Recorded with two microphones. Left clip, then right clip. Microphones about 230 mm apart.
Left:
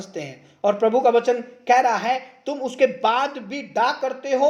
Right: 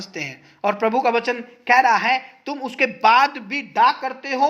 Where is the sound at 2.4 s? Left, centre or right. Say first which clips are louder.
Left 1 dB; right.